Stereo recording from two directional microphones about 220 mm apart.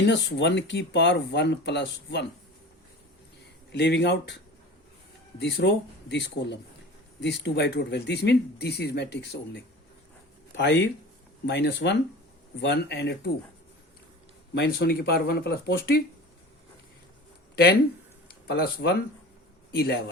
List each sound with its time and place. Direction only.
0.0 s speech: 50° left (ahead or behind)
3.7 s speech: 50° left (ahead or behind)
5.4 s speech: 50° left (ahead or behind)
14.5 s speech: 50° left (ahead or behind)
17.5 s speech: 45° left (ahead or behind)